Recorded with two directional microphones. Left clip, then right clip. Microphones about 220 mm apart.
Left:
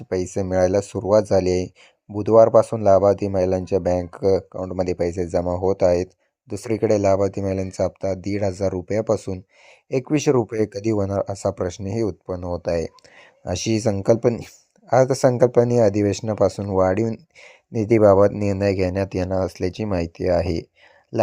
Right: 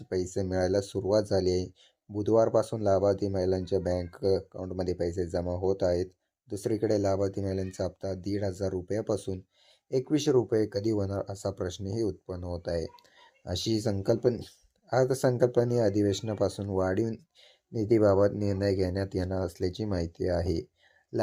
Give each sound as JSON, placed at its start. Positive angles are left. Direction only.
{"t": 0.1, "sound": "speech", "side_deg": 30}